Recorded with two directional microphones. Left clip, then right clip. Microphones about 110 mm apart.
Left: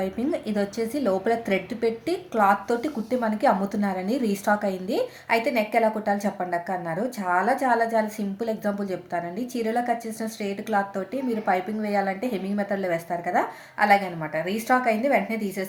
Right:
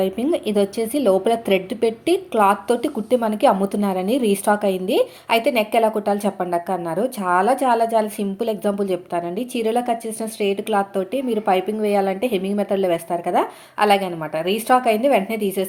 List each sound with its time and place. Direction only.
0.0 s a woman's voice: 15° right (ahead or behind)